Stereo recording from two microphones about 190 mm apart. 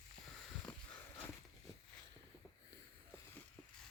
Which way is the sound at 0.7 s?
5° left (ahead or behind).